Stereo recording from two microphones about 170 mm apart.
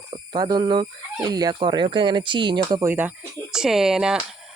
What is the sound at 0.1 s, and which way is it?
Speech, 25° right (ahead or behind).